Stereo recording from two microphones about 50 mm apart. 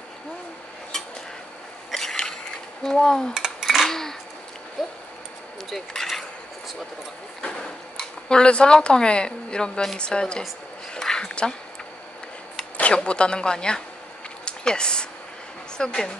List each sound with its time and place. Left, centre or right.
1.9 s mechanisms: centre
2.8 s speech: centre
3.3 s dishes: centre
3.8 s a sound: centre
4.8 s speech: centre
7.4 s speech: centre
11.0 s a sound: centre
12.7 s speech: left
14.4 s a sound: centre
15.8 s speech: centre